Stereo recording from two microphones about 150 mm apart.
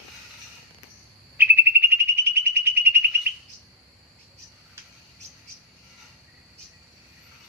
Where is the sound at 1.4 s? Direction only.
15° right (ahead or behind).